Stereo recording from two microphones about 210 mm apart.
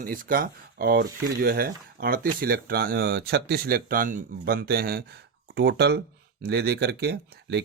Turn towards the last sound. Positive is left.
turn(degrees=-50)  # may be behind; listen again after turning